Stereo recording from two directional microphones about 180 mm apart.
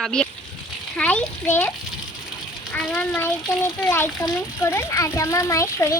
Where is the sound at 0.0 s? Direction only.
5° left (ahead or behind).